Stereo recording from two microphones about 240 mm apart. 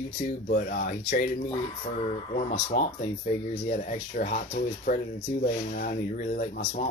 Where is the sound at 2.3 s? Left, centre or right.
Left.